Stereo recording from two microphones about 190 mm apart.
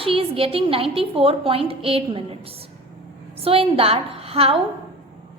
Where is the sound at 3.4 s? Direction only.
30° right (ahead or behind).